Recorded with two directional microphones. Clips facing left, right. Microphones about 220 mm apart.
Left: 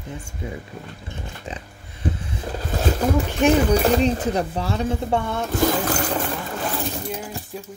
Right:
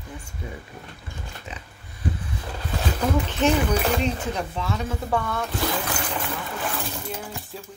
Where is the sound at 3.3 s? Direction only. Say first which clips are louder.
Left 5 dB; 15° left (ahead or behind).